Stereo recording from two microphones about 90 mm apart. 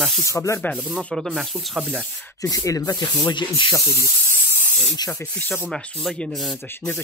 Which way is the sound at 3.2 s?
60° left (ahead or behind).